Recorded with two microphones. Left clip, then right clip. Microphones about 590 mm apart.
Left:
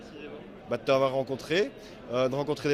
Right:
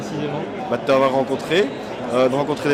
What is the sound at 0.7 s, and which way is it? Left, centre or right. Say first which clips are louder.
Speech: right 8 dB; left.